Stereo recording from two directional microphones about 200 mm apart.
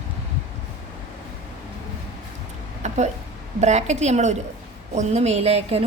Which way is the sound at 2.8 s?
35° right (ahead or behind).